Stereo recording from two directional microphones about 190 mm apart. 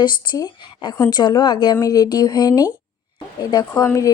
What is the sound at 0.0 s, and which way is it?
Speech, 20° left (ahead or behind).